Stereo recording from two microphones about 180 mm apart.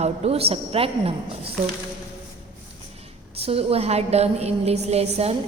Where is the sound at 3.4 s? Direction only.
35° right (ahead or behind).